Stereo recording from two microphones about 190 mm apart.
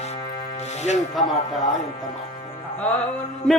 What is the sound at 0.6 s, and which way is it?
Music, 35° left (ahead or behind).